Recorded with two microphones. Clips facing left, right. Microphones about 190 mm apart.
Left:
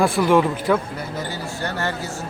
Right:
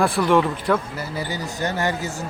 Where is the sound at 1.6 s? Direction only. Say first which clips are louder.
Right 3 dB; 15° right (ahead or behind).